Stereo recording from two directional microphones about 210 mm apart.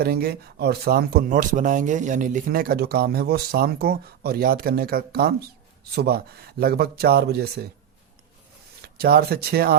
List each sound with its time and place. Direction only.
0.0 s speech: 45° right (ahead or behind)
8.8 s speech: 45° right (ahead or behind)